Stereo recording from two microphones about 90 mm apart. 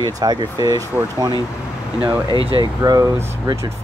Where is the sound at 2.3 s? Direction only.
80° right.